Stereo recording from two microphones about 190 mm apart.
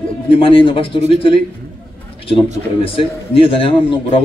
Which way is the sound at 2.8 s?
30° left (ahead or behind).